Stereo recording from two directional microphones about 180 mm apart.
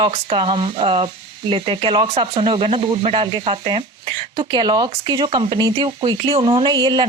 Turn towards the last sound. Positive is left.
turn(degrees=-25)  # may be behind; listen again after turning